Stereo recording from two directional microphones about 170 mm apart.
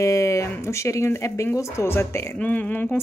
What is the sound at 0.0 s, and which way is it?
Speech, 20° left (ahead or behind).